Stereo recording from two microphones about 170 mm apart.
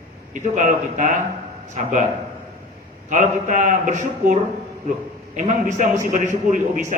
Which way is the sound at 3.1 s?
45° right (ahead or behind).